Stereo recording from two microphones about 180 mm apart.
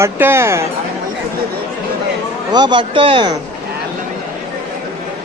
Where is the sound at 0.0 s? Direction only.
15° right (ahead or behind).